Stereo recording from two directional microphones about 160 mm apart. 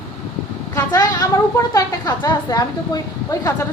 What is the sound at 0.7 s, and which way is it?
A woman's voice, 25° left (ahead or behind).